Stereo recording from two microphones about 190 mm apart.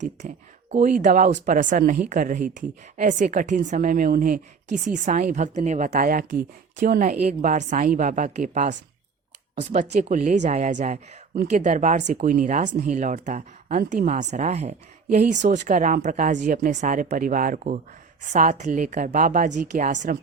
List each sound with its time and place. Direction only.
0.0 s speech: 40° right (ahead or behind)
9.9 s speech: 40° right (ahead or behind)